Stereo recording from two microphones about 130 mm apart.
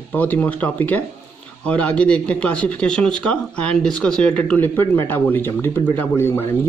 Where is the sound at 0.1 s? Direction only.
10° left (ahead or behind).